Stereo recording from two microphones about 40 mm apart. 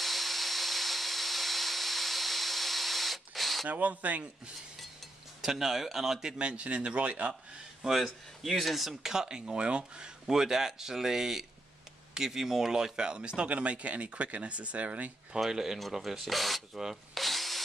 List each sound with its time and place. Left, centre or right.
0.0 s tools: centre
3.6 s speech: right
5.4 s speech: centre
6.2 s speech: right
7.8 s speech: centre; by 10.1 s right
10.2 s speech: centre
13.5 s speech: right
15.4 s speech: centre
16.7 s speech: centre
17.1 s tools: centre